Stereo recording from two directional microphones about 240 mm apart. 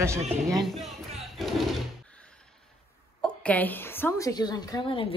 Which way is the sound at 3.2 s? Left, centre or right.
Centre.